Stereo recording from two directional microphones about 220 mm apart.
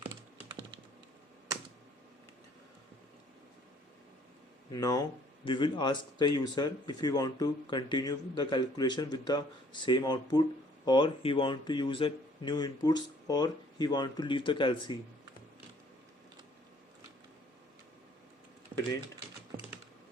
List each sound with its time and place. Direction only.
4.7 s speech: 15° left (ahead or behind)
18.7 s typing: 20° right (ahead or behind)